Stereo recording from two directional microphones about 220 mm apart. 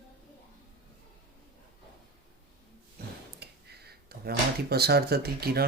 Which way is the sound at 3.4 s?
45° right (ahead or behind).